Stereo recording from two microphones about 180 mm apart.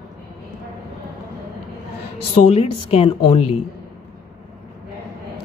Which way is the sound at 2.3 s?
35° left (ahead or behind).